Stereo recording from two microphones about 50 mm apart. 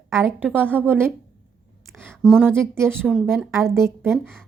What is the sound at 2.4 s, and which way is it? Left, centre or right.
Speech, right.